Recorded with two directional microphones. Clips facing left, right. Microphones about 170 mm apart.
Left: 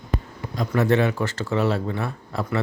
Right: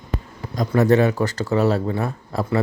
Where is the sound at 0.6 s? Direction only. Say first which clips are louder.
Right 4 dB; 40° right (ahead or behind).